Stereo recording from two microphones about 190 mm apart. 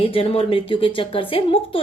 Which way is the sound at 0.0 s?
30° left (ahead or behind).